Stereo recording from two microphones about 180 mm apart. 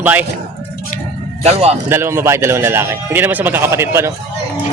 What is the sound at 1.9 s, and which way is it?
Speech, 15° right (ahead or behind).